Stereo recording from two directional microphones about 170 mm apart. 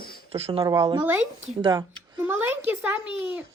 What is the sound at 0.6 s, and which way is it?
Speech, 20° right (ahead or behind).